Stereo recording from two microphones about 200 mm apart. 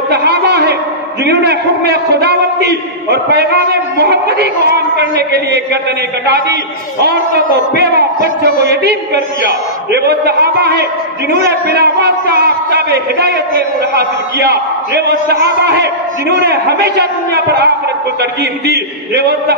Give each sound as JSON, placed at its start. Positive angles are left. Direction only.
{"t": 0.1, "sound": "a sound", "side_deg": -55}
{"t": 1.2, "sound": "a man's voice", "side_deg": -55}
{"t": 8.6, "sound": "a man's voice", "side_deg": -55}